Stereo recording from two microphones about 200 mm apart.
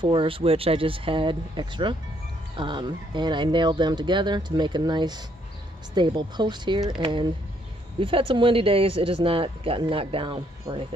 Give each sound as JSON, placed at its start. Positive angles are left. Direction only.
{"t": 0.0, "sound": "speech", "side_deg": -25}